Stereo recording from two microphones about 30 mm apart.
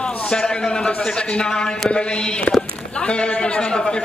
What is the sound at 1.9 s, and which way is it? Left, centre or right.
A man's voice, left.